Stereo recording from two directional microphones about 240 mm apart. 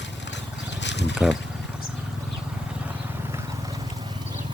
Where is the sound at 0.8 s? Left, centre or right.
Left.